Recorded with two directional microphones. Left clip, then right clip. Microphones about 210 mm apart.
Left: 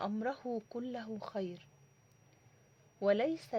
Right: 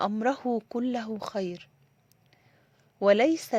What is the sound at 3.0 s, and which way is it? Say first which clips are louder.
Speech: right 10 dB; 30° right (ahead or behind).